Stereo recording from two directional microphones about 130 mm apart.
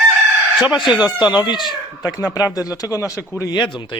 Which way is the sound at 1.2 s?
35° left (ahead or behind).